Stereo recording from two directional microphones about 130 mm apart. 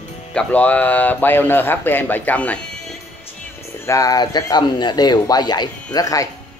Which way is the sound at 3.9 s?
25° left (ahead or behind).